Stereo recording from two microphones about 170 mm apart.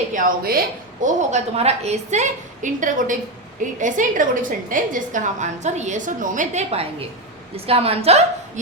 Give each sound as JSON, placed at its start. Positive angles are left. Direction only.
{"t": 0.1, "sound": "a woman's voice", "side_deg": -55}
{"t": 1.0, "sound": "a woman's voice", "side_deg": -40}